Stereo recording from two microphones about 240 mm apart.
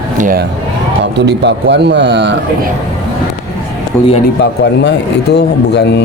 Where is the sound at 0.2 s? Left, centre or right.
Right.